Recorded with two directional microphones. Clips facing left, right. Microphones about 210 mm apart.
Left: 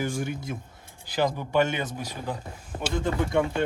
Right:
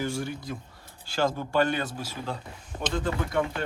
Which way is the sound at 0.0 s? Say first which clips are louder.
Left 1 dB; 15° left (ahead or behind).